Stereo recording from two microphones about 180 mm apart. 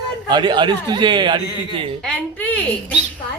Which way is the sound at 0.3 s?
25° right (ahead or behind).